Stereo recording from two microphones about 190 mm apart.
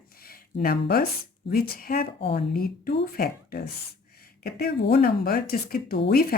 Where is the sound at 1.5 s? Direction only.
50° left (ahead or behind).